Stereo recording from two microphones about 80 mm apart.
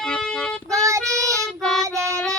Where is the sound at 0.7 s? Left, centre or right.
Right.